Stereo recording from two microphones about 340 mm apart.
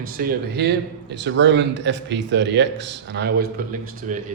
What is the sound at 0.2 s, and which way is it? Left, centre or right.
A man's voice, right.